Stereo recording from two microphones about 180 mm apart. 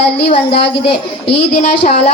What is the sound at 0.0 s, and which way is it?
A woman's voice, 30° left (ahead or behind).